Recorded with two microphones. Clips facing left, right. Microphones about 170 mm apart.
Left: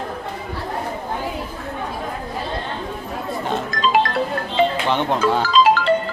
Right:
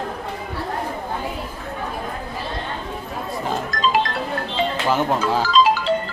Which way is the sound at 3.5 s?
Centre (ahead or behind).